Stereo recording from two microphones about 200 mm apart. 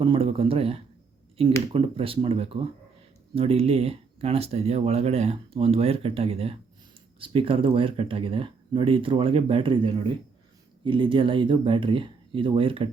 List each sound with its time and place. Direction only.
0.0 s speech: 25° right (ahead or behind)